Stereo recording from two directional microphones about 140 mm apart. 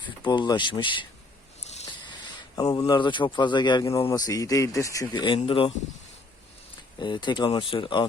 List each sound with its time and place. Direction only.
0.2 s speech: 30° left (ahead or behind)
2.6 s speech: 25° left (ahead or behind)
7.0 s speech: 35° left (ahead or behind)